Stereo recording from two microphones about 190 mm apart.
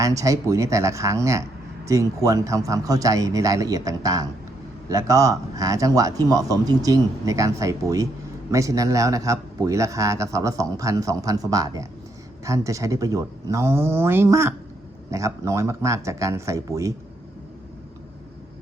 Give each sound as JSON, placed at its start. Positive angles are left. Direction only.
{"t": 0.0, "sound": "a man's voice", "side_deg": -15}